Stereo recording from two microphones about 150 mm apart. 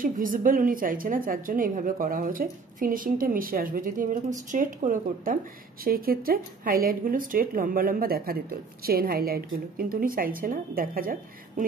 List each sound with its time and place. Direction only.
0.0 s speech: 65° right (ahead or behind)
5.9 s speech: 80° right